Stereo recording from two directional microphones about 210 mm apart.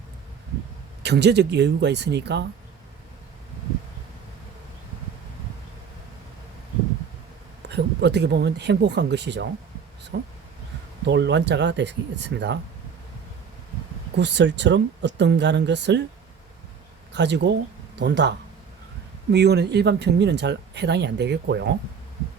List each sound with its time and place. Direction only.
1.0 s speech: 55° right (ahead or behind)
7.7 s speech: 55° right (ahead or behind)
14.2 s speech: 60° right (ahead or behind)
17.1 s speech: 55° right (ahead or behind)